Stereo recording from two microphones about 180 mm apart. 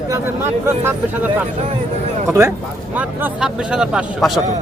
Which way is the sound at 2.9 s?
10° right (ahead or behind).